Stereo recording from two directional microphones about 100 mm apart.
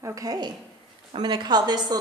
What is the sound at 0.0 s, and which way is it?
A woman's voice, 35° right (ahead or behind).